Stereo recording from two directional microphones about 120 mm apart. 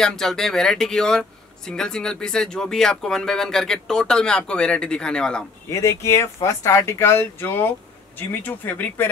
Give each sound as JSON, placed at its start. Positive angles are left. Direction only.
{"t": 0.0, "sound": "speech", "side_deg": 5}
{"t": 5.7, "sound": "speech", "side_deg": 25}